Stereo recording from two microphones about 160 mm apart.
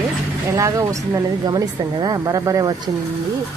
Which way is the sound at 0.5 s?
20° right (ahead or behind).